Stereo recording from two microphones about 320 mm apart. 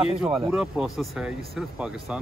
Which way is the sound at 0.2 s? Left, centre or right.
Centre.